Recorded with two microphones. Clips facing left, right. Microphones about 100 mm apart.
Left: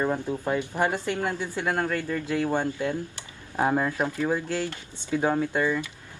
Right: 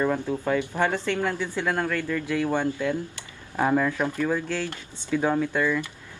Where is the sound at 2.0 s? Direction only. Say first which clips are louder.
Right 1 dB; 35° left (ahead or behind).